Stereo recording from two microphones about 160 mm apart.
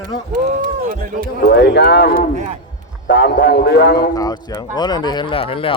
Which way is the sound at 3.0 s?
90° left.